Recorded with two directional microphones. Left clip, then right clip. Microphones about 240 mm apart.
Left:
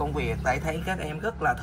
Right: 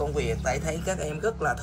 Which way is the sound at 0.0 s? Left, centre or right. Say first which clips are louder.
Even; centre.